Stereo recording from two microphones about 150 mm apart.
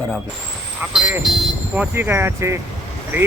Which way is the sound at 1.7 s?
10° right (ahead or behind).